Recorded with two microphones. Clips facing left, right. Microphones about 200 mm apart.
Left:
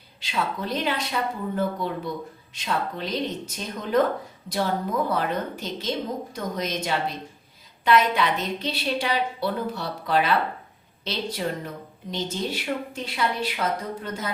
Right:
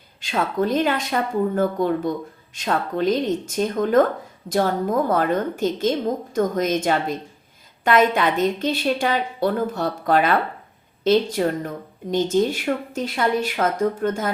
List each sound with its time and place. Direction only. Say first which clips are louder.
0.2 s a woman's voice: right 7 dB; 50° right (ahead or behind)